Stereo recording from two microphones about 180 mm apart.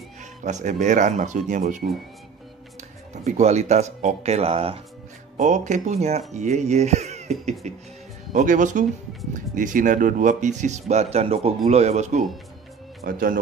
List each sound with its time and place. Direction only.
0.2 s speech: 40° right (ahead or behind)
3.3 s speech: 40° right (ahead or behind)
13.0 s speech: 50° right (ahead or behind)